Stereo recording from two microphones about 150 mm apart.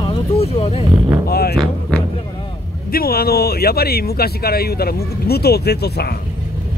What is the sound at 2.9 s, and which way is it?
Speech, 85° left.